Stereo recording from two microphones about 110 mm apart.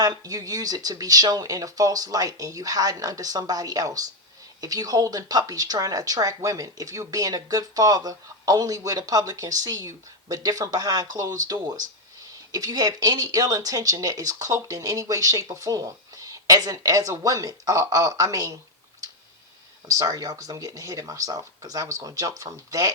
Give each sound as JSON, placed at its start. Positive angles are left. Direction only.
{"t": 0.0, "sound": "speech", "side_deg": -35}
{"t": 19.9, "sound": "speech", "side_deg": -30}